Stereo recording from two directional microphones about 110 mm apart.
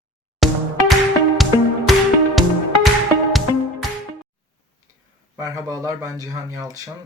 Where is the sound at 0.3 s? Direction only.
Centre (ahead or behind).